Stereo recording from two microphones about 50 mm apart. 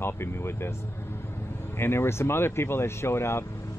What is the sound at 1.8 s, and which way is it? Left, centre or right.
Speech, left.